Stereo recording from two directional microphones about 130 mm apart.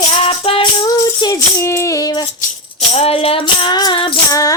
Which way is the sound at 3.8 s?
40° left (ahead or behind).